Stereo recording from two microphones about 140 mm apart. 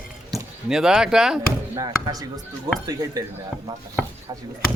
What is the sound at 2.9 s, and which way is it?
Speech, 25° right (ahead or behind).